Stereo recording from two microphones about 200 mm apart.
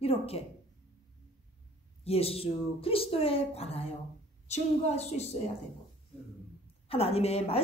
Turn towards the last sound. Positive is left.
turn(degrees=30)  # may be behind; listen again after turning